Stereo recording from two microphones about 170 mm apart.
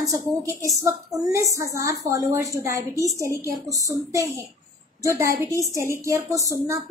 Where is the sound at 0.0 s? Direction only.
20° right (ahead or behind).